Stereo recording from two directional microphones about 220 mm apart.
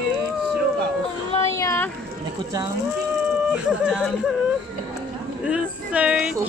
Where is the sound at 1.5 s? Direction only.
10° left (ahead or behind).